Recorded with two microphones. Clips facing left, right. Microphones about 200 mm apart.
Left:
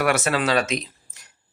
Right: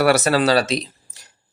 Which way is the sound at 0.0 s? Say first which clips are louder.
Right 5 dB; 40° right (ahead or behind).